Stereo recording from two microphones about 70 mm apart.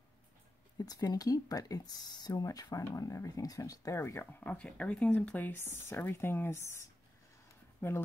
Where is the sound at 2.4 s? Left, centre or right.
Left.